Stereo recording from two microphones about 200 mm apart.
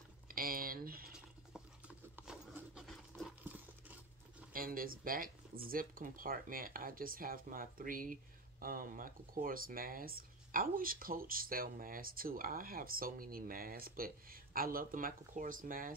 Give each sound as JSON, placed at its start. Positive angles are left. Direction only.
{"t": 0.3, "sound": "a sound", "side_deg": -45}
{"t": 1.5, "sound": "horse", "side_deg": -5}
{"t": 4.5, "sound": "speech", "side_deg": -45}